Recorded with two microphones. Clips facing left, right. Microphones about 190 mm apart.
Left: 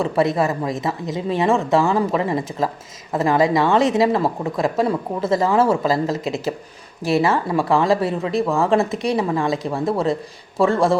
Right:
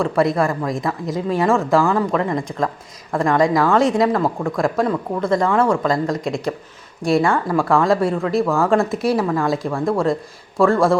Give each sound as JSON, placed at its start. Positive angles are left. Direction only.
{"t": 0.0, "sound": "speech", "side_deg": 0}